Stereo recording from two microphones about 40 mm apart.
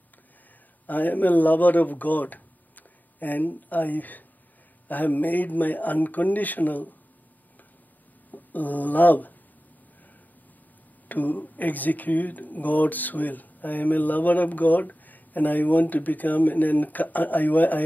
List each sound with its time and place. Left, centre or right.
0.8 s speech: left
8.3 s speech: left
11.1 s speech: left